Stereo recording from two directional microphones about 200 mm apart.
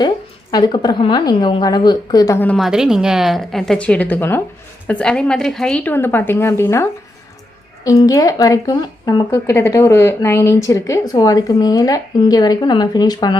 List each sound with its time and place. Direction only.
0.5 s speech: 20° left (ahead or behind)
7.9 s speech: 15° left (ahead or behind)